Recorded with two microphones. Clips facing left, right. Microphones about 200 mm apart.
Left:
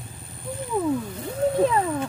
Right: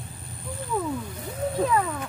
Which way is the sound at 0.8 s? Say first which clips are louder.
Left 5 dB; 25° left (ahead or behind).